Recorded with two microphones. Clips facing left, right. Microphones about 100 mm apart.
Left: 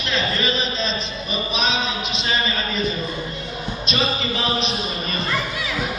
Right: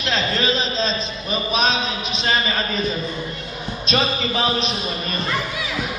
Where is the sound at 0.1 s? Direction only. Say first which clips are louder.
Right 2 dB; 35° right (ahead or behind).